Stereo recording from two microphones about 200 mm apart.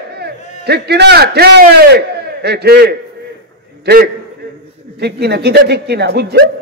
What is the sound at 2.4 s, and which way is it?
A man's voice, 55° right (ahead or behind).